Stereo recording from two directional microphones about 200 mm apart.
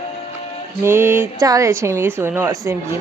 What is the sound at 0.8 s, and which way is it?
Speech, 10° right (ahead or behind).